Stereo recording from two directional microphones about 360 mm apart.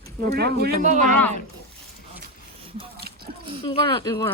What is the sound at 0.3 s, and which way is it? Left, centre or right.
Speech, right.